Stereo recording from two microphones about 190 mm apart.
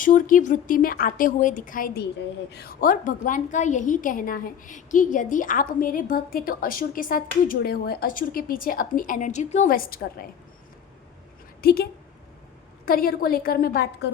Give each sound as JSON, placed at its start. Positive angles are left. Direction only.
{"t": 0.0, "sound": "a woman's voice", "side_deg": 45}
{"t": 11.6, "sound": "a woman's voice", "side_deg": 55}